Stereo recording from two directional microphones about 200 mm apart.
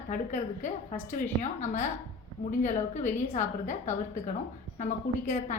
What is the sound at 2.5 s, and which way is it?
A woman's voice, 35° left (ahead or behind).